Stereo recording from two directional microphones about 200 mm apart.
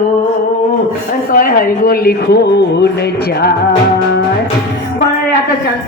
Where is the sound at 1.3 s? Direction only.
45° left (ahead or behind).